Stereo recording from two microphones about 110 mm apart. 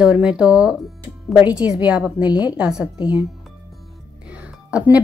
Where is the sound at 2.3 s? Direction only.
40° left (ahead or behind).